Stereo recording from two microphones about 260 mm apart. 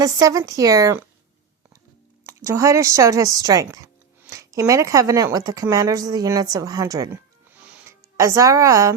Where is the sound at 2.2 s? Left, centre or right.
Centre.